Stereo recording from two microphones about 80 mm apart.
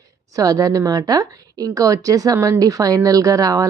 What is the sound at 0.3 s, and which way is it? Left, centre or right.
A woman's voice, right.